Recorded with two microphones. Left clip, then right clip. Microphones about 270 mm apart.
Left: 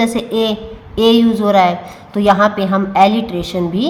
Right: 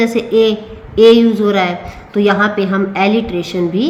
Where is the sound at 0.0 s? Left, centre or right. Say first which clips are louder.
Right 4 dB; centre.